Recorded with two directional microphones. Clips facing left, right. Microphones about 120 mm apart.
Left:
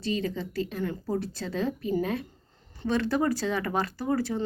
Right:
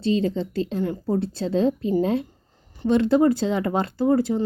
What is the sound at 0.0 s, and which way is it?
A woman's voice, 25° right (ahead or behind).